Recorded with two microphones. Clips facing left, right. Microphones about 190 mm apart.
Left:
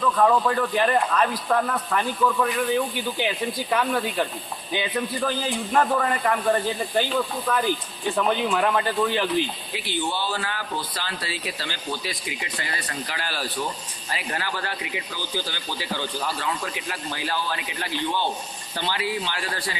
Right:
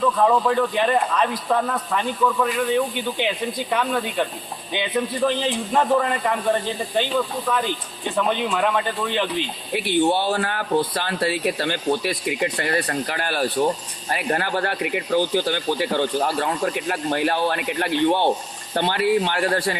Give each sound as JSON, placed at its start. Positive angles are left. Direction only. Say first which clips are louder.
{"t": 0.2, "sound": "a man's voice", "louder": "even", "side_deg": -5}
{"t": 8.1, "sound": "a man's voice", "louder": "right 1 dB", "side_deg": 0}
{"t": 9.7, "sound": "speech", "louder": "right 10 dB", "side_deg": -60}